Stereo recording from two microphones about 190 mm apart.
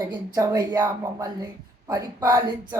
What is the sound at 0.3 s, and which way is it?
Speech, 20° right (ahead or behind).